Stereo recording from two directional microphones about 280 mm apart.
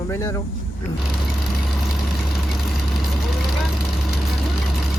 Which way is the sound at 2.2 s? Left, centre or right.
Centre.